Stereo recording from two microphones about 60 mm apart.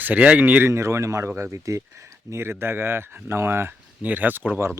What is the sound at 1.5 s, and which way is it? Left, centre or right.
Speech, right.